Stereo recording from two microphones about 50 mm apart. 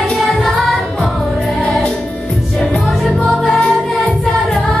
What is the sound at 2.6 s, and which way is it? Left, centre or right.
Music, centre.